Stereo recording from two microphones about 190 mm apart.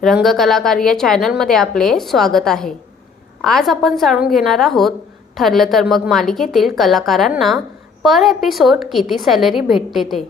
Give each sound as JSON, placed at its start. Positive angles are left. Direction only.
{"t": 0.0, "sound": "a woman's voice", "side_deg": 0}